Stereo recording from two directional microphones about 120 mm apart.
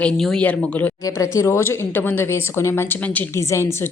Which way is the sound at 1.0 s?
25° left (ahead or behind).